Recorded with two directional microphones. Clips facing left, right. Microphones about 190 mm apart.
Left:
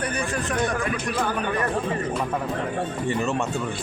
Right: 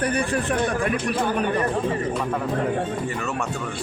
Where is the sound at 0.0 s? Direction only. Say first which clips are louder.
Right 4 dB; 30° right (ahead or behind).